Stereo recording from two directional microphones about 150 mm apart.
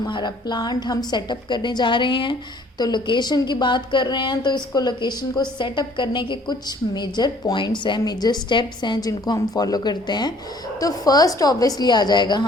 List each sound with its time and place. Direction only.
0.1 s a woman's voice: 30° left (ahead or behind)